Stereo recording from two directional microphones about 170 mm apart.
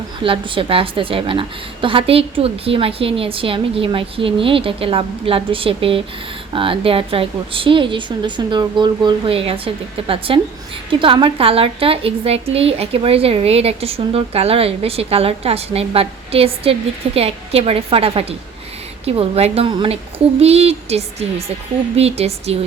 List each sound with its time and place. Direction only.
0.2 s a woman's voice: 30° right (ahead or behind)